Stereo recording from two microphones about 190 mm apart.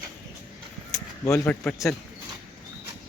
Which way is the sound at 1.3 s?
10° left (ahead or behind).